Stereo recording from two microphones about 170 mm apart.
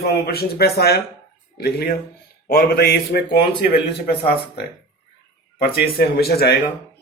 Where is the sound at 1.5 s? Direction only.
65° left (ahead or behind).